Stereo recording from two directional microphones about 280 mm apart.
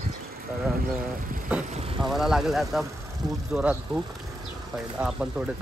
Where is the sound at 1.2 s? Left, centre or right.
Right.